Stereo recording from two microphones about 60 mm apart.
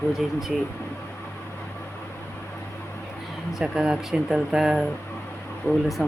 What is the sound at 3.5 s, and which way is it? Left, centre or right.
Speech, centre.